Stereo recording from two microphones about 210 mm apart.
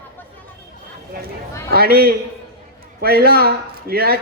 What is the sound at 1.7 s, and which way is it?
A man's voice, 45° right (ahead or behind).